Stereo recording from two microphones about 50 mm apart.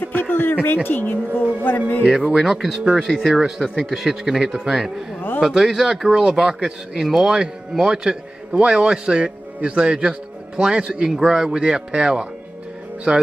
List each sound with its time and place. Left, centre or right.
0.0 s a sound: left
0.8 s speech: left
2.0 s speech: centre
2.3 s speech: centre